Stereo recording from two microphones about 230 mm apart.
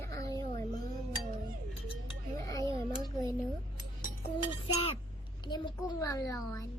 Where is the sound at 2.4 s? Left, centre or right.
Centre.